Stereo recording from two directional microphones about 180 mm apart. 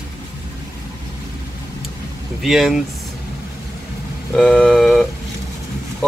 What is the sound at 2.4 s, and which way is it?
Speech, centre (ahead or behind).